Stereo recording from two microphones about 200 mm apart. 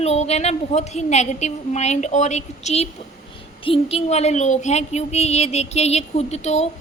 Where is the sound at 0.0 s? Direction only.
30° left (ahead or behind).